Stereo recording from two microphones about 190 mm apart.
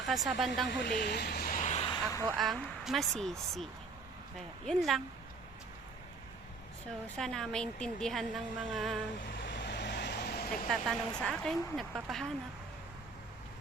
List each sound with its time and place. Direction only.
0.0 s a woman's voice: centre (ahead or behind)
0.7 s a sound: 55° left (ahead or behind); by 2.0 s 30° left (ahead or behind)
2.4 s a woman's voice: centre (ahead or behind)
7.2 s a woman's voice: 5° left (ahead or behind)
9.4 s vehicle: 65° left (ahead or behind)
10.7 s a woman's voice: 5° left (ahead or behind)